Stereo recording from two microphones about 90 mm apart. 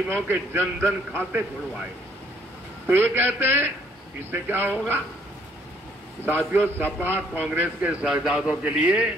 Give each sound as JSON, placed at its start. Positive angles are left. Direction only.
{"t": 0.3, "sound": "a man's voice", "side_deg": -20}
{"t": 2.9, "sound": "a man's voice", "side_deg": -20}
{"t": 6.2, "sound": "a man's voice", "side_deg": -20}
{"t": 8.0, "sound": "a man's voice", "side_deg": -5}